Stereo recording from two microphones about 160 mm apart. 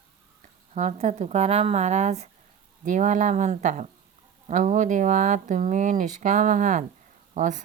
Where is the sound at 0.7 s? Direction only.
45° right (ahead or behind).